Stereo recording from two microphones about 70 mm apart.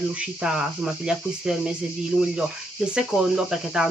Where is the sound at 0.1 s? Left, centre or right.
Centre.